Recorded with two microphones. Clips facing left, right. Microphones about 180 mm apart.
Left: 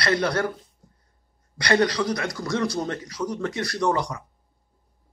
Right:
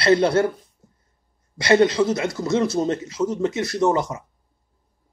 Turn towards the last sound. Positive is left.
turn(degrees=-25)  # may be behind; listen again after turning